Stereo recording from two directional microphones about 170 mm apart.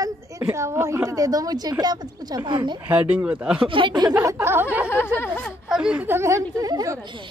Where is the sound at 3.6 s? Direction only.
30° right (ahead or behind).